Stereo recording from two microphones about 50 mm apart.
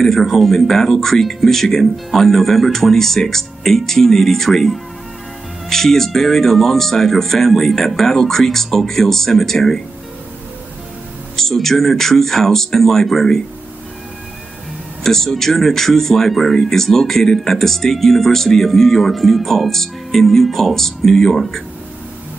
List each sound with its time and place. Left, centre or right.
0.0 s speech: centre
11.3 s speech: centre
15.0 s speech: centre